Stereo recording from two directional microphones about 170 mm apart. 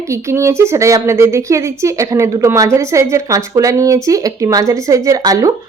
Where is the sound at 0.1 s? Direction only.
15° right (ahead or behind).